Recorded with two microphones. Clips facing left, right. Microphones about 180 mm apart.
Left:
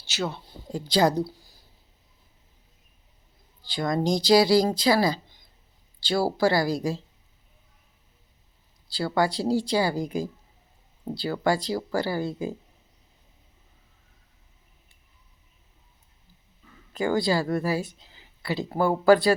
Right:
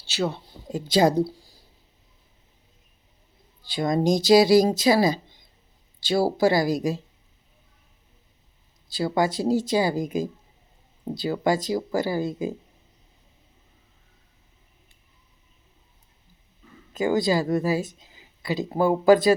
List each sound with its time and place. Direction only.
0.1 s speech: 30° right (ahead or behind)
3.7 s speech: 25° right (ahead or behind)
8.9 s speech: 20° right (ahead or behind)
16.9 s speech: 20° right (ahead or behind)